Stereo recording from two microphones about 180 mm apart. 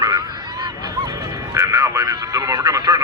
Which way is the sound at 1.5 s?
15° right (ahead or behind).